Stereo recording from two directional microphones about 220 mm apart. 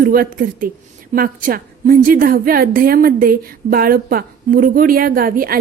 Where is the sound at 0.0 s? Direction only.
40° right (ahead or behind).